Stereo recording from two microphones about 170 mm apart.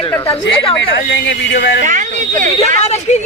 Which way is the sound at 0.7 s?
90° left.